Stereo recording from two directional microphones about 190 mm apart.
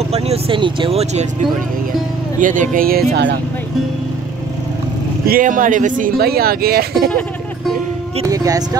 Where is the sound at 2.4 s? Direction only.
45° right (ahead or behind); by 3.4 s 60° right (ahead or behind).